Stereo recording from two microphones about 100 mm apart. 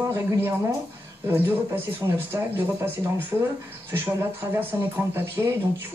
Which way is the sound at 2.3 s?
20° right (ahead or behind).